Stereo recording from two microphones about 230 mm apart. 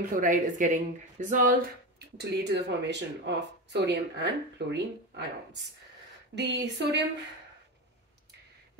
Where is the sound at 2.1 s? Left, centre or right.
Right.